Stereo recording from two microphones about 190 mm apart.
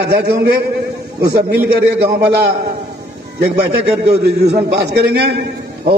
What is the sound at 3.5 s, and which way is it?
A man's voice, 60° right (ahead or behind).